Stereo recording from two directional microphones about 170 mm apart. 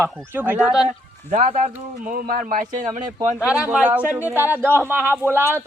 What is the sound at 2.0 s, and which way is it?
Speech, 55° right (ahead or behind).